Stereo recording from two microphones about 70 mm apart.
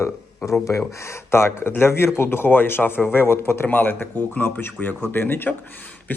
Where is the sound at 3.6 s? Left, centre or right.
Left.